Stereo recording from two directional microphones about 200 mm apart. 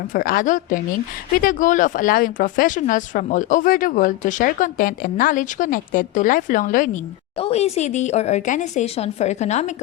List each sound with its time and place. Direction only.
0.1 s a woman's voice: 45° left (ahead or behind)
7.3 s speech: 30° left (ahead or behind)